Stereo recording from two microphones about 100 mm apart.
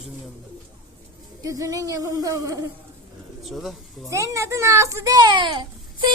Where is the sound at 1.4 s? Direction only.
35° right (ahead or behind).